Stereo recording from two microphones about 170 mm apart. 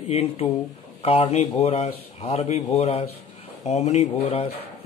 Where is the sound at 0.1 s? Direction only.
35° left (ahead or behind).